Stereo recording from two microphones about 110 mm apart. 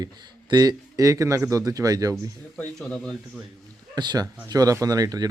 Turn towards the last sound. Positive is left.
turn(degrees=-35)  # may be behind; listen again after turning